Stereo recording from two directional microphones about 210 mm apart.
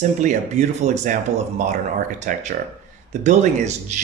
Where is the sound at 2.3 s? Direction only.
40° right (ahead or behind).